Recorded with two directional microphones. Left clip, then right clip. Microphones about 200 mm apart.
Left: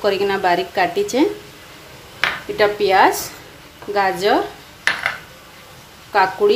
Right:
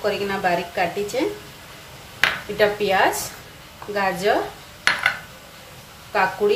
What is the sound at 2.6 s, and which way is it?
A woman's voice, 40° left (ahead or behind).